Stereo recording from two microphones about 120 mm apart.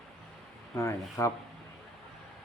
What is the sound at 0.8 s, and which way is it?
Speech, 25° left (ahead or behind).